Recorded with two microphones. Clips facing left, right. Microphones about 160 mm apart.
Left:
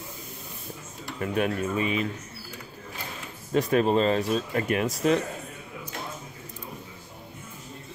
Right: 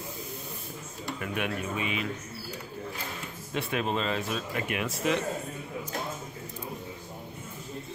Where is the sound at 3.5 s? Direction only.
40° left (ahead or behind).